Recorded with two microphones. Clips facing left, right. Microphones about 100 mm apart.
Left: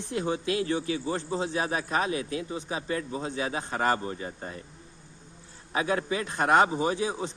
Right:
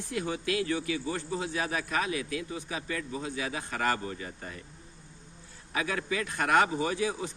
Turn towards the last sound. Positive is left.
turn(degrees=25)  # may be behind; listen again after turning